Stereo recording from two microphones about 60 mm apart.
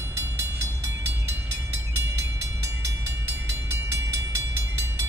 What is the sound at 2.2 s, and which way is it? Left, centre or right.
Train, right.